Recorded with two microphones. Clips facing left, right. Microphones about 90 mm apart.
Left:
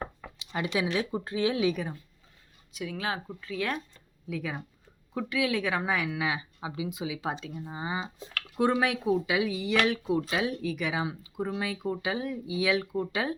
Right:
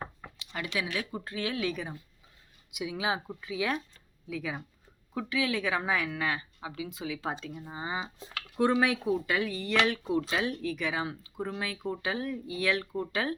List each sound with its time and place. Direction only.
0.3 s speech: 20° left (ahead or behind)
2.7 s speech: 15° right (ahead or behind); by 13.3 s 5° left (ahead or behind)